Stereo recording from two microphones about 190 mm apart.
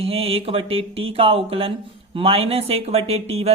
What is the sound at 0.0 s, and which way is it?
Speech, 30° right (ahead or behind).